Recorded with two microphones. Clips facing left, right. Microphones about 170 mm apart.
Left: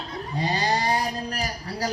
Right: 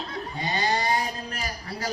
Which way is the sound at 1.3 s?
35° left (ahead or behind).